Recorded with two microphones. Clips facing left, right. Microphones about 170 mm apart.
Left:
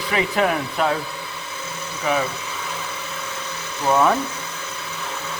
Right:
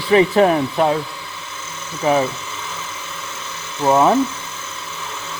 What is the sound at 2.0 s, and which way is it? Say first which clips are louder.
Speech: right 6 dB; 35° right (ahead or behind).